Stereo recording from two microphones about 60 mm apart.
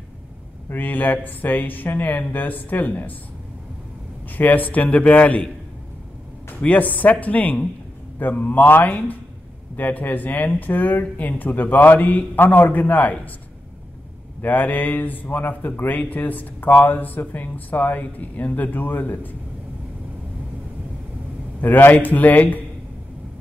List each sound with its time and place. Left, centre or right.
0.7 s speech: left
4.4 s a man's voice: left
6.6 s a man's voice: left
14.4 s a man's voice: left
21.5 s a man's voice: left